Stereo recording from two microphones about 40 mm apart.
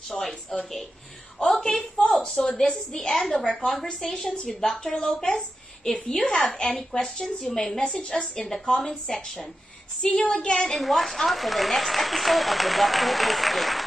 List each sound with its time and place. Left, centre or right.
0.1 s a woman's voice: centre
1.6 s a woman's voice: centre
7.8 s a woman's voice: left
8.4 s a woman's voice: centre
10.2 s a woman's voice: left
10.8 s speech: centre